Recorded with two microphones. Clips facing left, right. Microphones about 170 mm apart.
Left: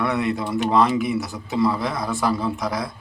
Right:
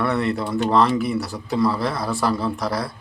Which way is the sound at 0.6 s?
10° left (ahead or behind).